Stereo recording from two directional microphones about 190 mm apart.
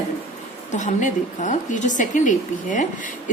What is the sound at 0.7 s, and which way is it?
A woman's voice, 40° left (ahead or behind).